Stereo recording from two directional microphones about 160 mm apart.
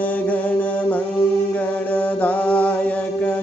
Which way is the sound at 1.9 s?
10° left (ahead or behind).